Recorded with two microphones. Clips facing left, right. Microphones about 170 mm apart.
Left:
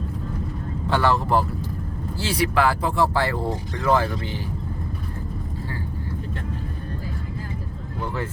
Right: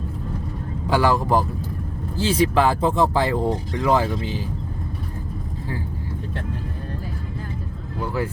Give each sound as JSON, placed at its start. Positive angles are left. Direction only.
{"t": 0.9, "sound": "speech", "side_deg": -10}
{"t": 8.0, "sound": "speech", "side_deg": -10}